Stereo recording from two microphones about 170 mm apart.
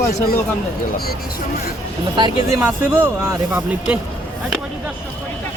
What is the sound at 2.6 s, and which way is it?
Speech, 10° right (ahead or behind).